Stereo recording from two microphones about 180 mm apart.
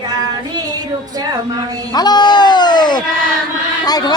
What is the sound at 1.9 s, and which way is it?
Music, 25° left (ahead or behind).